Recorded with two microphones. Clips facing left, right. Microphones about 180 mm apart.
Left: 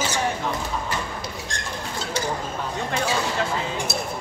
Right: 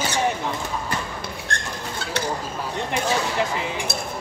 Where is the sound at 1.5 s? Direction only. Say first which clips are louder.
Right 3 dB; 60° right (ahead or behind).